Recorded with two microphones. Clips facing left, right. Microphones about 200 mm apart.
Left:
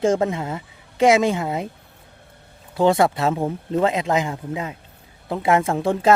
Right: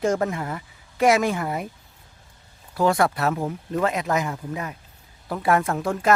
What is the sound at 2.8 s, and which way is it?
Speech, 25° left (ahead or behind).